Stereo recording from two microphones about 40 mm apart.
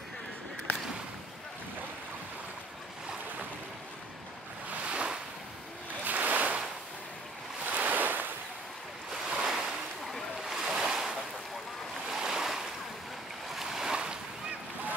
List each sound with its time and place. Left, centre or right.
4.8 s waves: right
6.0 s waves: right
7.6 s waves: right
9.1 s waves: centre